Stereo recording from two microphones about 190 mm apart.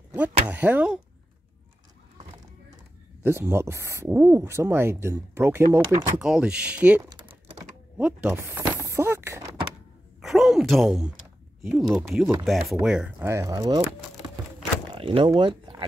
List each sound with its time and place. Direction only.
0.1 s speech: 10° right (ahead or behind)
3.3 s speech: 15° right (ahead or behind)
7.1 s typing: 25° right (ahead or behind)
8.0 s a sound: 10° right (ahead or behind)
10.2 s gasp: centre (ahead or behind)
11.6 s speech: centre (ahead or behind); by 13.8 s 20° right (ahead or behind)
15.0 s speech: 30° right (ahead or behind)